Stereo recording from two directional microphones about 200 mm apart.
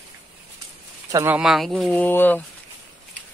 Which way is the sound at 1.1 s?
10° right (ahead or behind).